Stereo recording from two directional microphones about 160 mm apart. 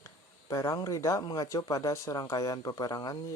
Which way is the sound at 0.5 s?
20° left (ahead or behind).